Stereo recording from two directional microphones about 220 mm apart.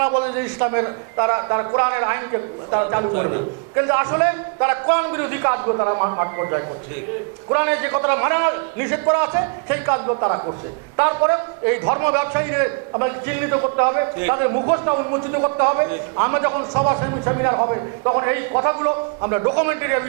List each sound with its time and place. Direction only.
0.3 s a man's voice: 15° right (ahead or behind)